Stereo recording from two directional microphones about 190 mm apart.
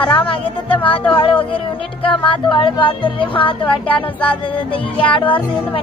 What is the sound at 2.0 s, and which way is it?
Speech, 25° left (ahead or behind).